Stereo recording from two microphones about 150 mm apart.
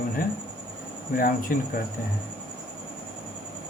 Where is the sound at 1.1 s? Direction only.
70° left (ahead or behind).